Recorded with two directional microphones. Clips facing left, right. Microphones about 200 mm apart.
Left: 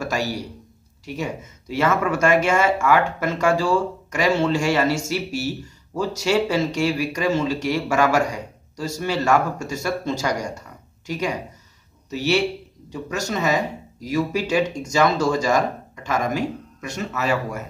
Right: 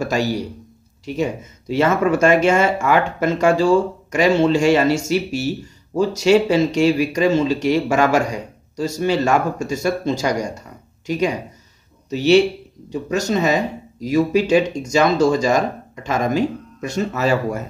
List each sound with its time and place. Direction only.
0.0 s speech: 20° right (ahead or behind)